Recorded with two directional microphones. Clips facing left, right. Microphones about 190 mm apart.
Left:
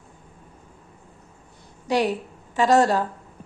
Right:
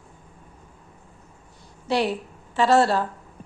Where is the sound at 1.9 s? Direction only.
40° left (ahead or behind).